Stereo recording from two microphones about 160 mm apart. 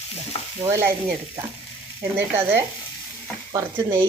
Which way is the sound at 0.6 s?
15° right (ahead or behind).